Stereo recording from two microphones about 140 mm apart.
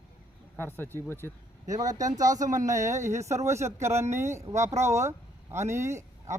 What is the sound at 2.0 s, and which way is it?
Speech, 65° right (ahead or behind).